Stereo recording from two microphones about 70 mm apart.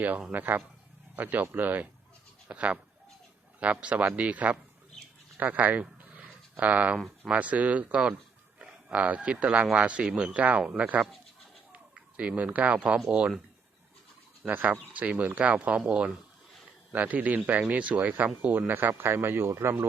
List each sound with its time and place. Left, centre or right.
0.0 s speech: right
6.0 s a sound: right
6.9 s speech: centre
7.3 s speech: centre
14.4 s a man's voice: right